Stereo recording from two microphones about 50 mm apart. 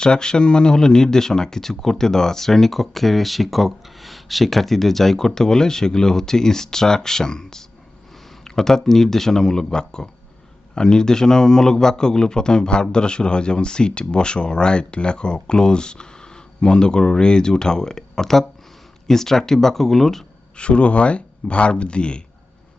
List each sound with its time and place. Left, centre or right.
0.0 s speech: centre
20.6 s speech: left